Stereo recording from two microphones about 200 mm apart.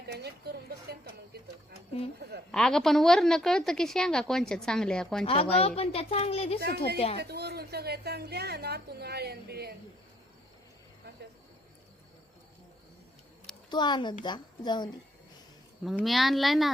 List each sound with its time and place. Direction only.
0.1 s a sound: 55° right (ahead or behind)
2.5 s a woman's voice: centre (ahead or behind)
5.2 s a woman's voice: 30° left (ahead or behind)
7.2 s a sound: 55° right (ahead or behind)
13.7 s a woman's voice: 20° left (ahead or behind)
15.8 s a woman's voice: centre (ahead or behind)